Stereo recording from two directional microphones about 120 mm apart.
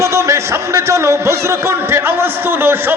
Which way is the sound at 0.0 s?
25° right (ahead or behind).